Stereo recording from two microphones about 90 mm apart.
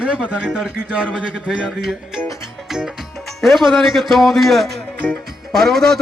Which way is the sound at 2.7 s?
5° right (ahead or behind).